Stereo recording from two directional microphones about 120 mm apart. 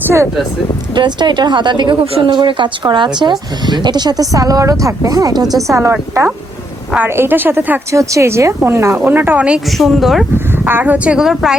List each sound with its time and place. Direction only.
0.9 s a woman's voice: 40° right (ahead or behind); by 9.6 s 10° right (ahead or behind)
9.7 s speech: centre (ahead or behind)
10.3 s speech: 15° right (ahead or behind)